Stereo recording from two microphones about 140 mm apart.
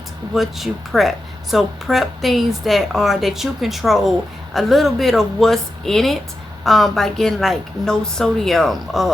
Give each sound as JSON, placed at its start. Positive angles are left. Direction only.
{"t": 0.3, "sound": "speech", "side_deg": 0}